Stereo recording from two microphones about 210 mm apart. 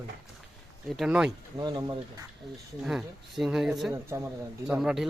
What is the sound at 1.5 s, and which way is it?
Speech, 20° right (ahead or behind).